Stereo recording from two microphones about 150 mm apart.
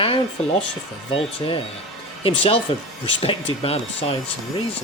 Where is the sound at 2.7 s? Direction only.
35° left (ahead or behind).